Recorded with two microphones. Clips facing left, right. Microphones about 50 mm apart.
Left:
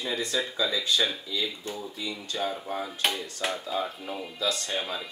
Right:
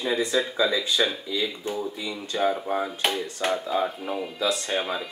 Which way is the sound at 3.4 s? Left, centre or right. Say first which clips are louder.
Right 7 dB; centre.